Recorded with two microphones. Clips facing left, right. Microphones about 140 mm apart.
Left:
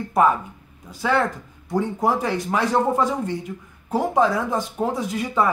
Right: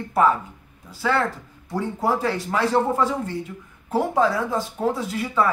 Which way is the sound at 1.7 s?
20° left (ahead or behind).